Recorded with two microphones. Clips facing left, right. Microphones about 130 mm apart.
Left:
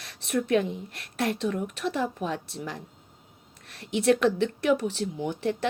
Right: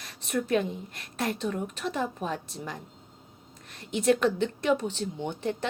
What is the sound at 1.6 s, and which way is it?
Speech, 70° left (ahead or behind).